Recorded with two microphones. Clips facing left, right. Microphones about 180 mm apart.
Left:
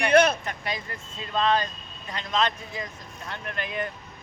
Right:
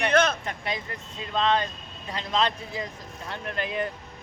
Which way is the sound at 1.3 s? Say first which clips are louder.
Even; 20° right (ahead or behind).